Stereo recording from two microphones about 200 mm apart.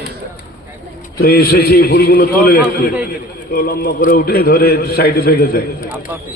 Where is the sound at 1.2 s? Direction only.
50° left (ahead or behind).